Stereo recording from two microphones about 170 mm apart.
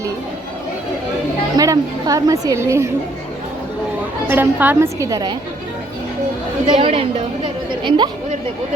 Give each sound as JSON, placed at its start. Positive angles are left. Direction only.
{"t": 1.5, "sound": "a woman's voice", "side_deg": -20}
{"t": 4.3, "sound": "a woman's voice", "side_deg": -10}
{"t": 6.7, "sound": "a woman's voice", "side_deg": -30}